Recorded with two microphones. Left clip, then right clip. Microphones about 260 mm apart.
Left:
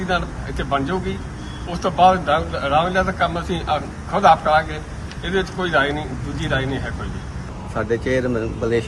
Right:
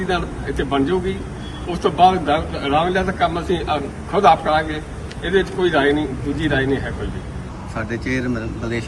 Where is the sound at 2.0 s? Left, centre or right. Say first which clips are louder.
Even; left.